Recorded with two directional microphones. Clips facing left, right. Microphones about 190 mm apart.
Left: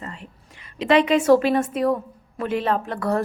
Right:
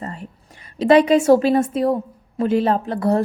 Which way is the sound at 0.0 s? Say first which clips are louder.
Right 5 dB; 40° right (ahead or behind).